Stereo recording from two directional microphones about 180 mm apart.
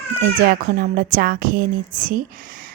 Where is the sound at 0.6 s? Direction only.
50° right (ahead or behind).